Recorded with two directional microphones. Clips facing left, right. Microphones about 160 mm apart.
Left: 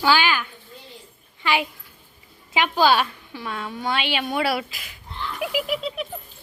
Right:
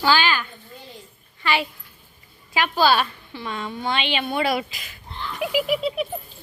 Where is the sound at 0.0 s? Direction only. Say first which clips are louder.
Even; 10° left (ahead or behind).